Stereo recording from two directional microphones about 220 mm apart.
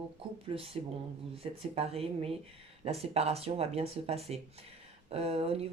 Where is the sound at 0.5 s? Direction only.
25° right (ahead or behind).